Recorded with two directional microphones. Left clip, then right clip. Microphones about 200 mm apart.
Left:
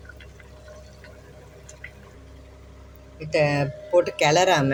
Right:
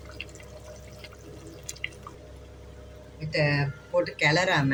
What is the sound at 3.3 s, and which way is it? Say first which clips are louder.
Speech: left 5 dB; 45° left (ahead or behind).